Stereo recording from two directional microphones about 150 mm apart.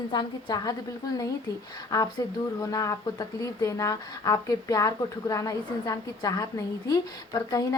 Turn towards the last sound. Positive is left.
turn(degrees=25)  # may be behind; listen again after turning